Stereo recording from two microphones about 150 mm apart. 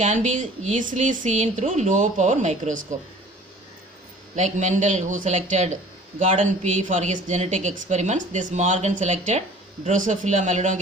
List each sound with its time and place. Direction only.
0.0 s speech: 55° right (ahead or behind)
4.4 s speech: 55° right (ahead or behind)